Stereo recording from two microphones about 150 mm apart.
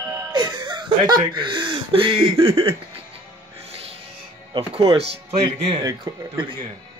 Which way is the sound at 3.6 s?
40° right (ahead or behind).